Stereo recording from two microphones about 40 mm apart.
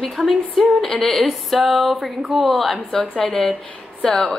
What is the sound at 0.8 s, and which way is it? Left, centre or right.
Speech, centre.